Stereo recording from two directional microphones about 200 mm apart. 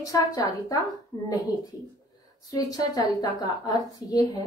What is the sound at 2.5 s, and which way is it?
A woman's voice, 20° left (ahead or behind).